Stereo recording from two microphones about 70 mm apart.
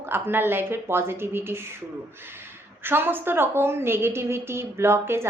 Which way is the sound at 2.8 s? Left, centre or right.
Right.